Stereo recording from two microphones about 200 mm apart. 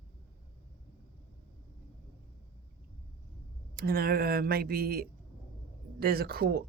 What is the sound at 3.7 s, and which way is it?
Speech, 50° right (ahead or behind).